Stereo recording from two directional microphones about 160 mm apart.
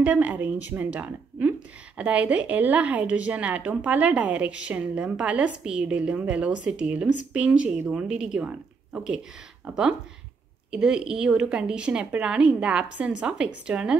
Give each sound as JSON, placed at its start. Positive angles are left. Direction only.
{"t": 0.0, "sound": "a woman's voice", "side_deg": -10}